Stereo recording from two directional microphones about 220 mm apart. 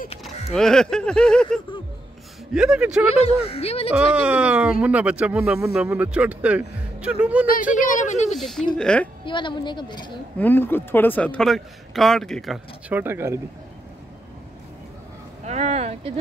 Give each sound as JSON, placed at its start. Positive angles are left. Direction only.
{"t": 0.2, "sound": "speech", "side_deg": 0}
{"t": 3.4, "sound": "a woman's voice", "side_deg": 25}
{"t": 3.9, "sound": "speech", "side_deg": -5}
{"t": 7.7, "sound": "speech", "side_deg": 35}
{"t": 8.4, "sound": "speech", "side_deg": 0}
{"t": 9.2, "sound": "a woman's voice", "side_deg": 20}
{"t": 10.4, "sound": "speech", "side_deg": 10}
{"t": 15.4, "sound": "a sound", "side_deg": -30}